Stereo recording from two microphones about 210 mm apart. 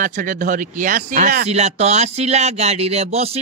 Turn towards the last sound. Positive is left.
turn(degrees=-30)  # may be behind; listen again after turning